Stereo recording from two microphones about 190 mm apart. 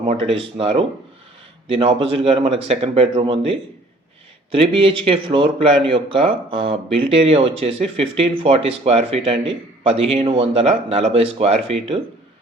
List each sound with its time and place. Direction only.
0.0 s speech: 30° right (ahead or behind)